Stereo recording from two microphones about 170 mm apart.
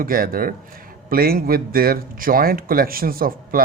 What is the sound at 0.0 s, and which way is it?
Speech, 55° right (ahead or behind).